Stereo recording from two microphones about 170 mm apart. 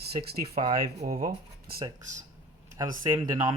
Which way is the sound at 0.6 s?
40° right (ahead or behind).